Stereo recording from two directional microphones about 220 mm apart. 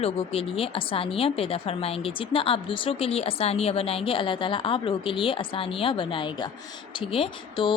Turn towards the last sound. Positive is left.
turn(degrees=20)  # may be behind; listen again after turning